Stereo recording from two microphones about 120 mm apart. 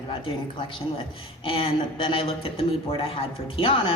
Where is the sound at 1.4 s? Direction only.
50° left (ahead or behind).